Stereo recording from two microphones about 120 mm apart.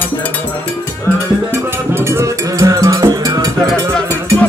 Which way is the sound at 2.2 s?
25° right (ahead or behind).